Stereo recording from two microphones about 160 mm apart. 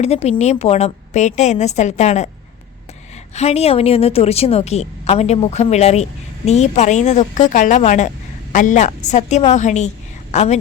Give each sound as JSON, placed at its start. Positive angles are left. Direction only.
{"t": 0.0, "sound": "a woman's voice", "side_deg": 40}
{"t": 3.3, "sound": "a woman's voice", "side_deg": 40}